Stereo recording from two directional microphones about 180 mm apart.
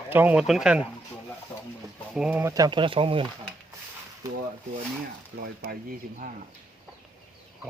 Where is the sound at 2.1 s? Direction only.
5° right (ahead or behind); by 3.2 s 30° right (ahead or behind).